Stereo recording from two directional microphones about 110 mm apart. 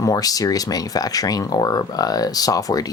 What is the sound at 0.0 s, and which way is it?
Speech, 35° left (ahead or behind).